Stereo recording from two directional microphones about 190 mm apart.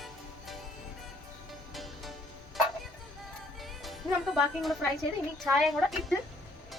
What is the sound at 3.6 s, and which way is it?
Music, centre (ahead or behind).